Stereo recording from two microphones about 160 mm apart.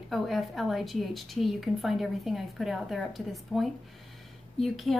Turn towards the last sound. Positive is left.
turn(degrees=0)  # may be behind; listen again after turning